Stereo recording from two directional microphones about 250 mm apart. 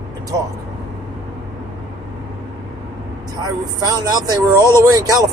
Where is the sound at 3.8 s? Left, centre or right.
Centre.